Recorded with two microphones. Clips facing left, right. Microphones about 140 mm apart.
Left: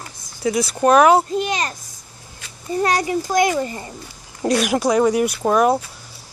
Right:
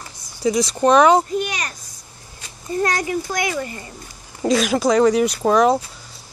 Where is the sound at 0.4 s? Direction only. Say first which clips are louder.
Right 1 dB; 5° left (ahead or behind).